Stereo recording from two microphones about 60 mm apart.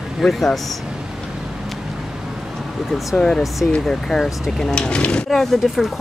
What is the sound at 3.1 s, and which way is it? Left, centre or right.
Speech, centre.